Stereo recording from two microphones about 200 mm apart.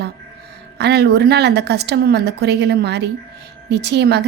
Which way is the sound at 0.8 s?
55° right (ahead or behind).